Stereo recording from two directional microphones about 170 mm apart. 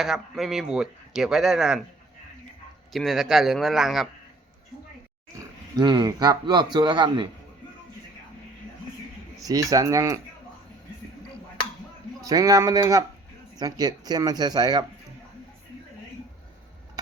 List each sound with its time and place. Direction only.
0.0 s speech: centre (ahead or behind)
2.9 s speech: centre (ahead or behind)
5.7 s a man's voice: 25° right (ahead or behind)
9.5 s a man's voice: 20° right (ahead or behind)
12.2 s a man's voice: 20° right (ahead or behind)